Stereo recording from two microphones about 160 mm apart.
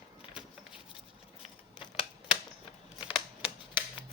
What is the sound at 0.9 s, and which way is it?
Scissors, 35° left (ahead or behind).